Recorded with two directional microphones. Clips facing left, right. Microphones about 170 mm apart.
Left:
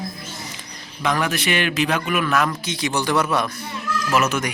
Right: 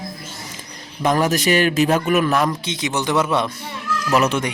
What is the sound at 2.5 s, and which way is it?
A man's voice, 20° right (ahead or behind).